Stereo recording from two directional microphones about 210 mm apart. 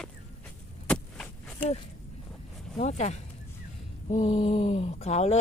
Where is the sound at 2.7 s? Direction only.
35° left (ahead or behind).